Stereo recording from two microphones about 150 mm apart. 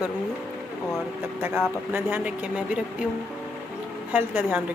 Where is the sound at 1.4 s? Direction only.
15° right (ahead or behind).